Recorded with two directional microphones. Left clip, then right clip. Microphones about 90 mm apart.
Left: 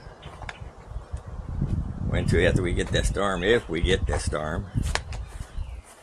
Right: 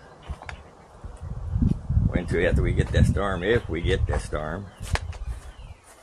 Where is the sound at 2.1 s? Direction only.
15° left (ahead or behind).